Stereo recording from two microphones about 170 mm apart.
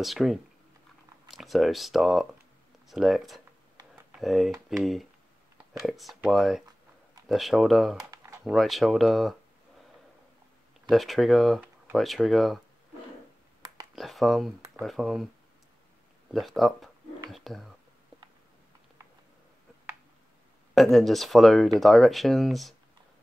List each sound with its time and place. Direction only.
0.0 s speech: centre (ahead or behind)
8.1 s a sound: 15° right (ahead or behind)
8.5 s speech: centre (ahead or behind)
10.9 s speech: centre (ahead or behind)
13.9 s speech: centre (ahead or behind)
16.3 s speech: centre (ahead or behind)
20.7 s speech: centre (ahead or behind)